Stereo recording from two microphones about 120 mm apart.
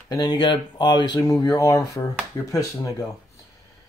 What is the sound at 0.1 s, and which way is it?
Speech, 35° left (ahead or behind).